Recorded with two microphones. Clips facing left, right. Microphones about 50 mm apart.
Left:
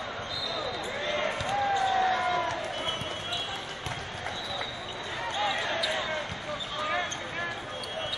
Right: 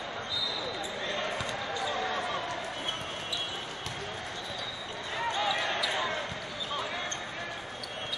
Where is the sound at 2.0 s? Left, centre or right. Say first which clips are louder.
Left 6 dB; left.